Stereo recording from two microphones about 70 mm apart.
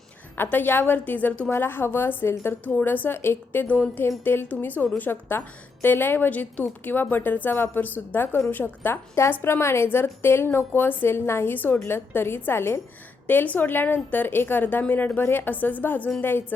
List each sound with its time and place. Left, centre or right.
0.3 s a woman's voice: left
13.2 s a woman's voice: left